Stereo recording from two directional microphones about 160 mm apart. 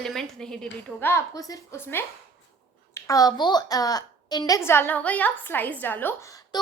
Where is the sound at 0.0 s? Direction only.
5° left (ahead or behind).